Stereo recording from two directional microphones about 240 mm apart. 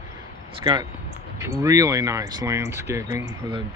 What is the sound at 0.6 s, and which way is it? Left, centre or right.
Speech, centre.